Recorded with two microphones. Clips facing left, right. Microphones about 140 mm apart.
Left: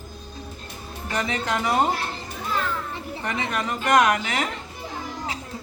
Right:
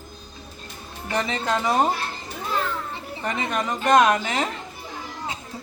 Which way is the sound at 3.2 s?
30° right (ahead or behind).